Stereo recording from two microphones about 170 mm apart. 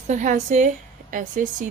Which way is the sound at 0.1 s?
45° right (ahead or behind).